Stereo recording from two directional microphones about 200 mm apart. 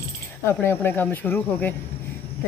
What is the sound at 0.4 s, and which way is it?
Speech, 10° left (ahead or behind).